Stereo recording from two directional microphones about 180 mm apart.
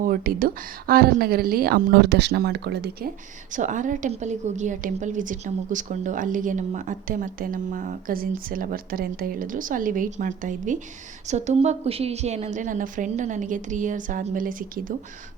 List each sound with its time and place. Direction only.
0.0 s a woman's voice: 50° right (ahead or behind)
3.5 s a woman's voice: 45° right (ahead or behind)